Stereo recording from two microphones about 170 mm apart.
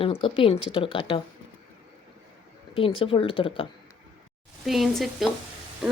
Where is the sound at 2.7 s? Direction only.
35° left (ahead or behind).